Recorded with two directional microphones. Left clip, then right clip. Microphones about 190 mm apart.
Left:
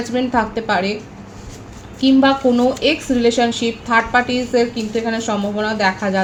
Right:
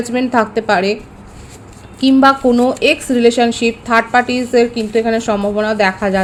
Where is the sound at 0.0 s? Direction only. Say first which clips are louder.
Right 3 dB; 55° right (ahead or behind).